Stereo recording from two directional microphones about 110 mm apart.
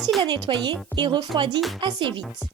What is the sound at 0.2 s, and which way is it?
Speech, 45° right (ahead or behind).